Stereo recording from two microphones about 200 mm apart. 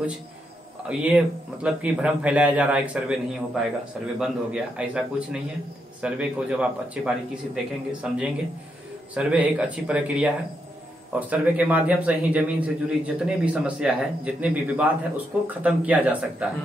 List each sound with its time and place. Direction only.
0.8 s speech: 5° right (ahead or behind)